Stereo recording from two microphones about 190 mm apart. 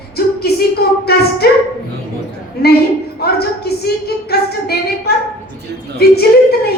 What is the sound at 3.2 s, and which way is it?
A woman's voice, 55° left (ahead or behind).